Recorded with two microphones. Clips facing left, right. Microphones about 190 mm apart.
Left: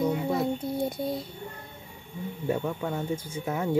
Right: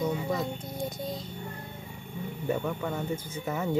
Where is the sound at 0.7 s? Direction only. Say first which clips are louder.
Left 5 dB; 60° left (ahead or behind).